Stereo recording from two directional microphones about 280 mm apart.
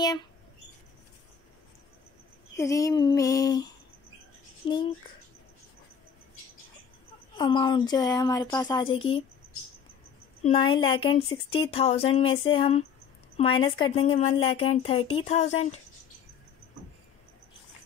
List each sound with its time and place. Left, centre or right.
2.5 s a woman's voice: centre
7.3 s a woman's voice: centre
10.4 s a woman's voice: centre